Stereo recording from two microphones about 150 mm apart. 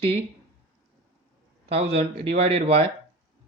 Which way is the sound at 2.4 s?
45° right (ahead or behind).